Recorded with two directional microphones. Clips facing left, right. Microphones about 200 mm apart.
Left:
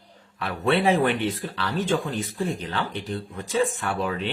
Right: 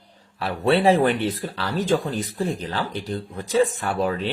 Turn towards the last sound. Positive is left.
turn(degrees=-40)  # may be behind; listen again after turning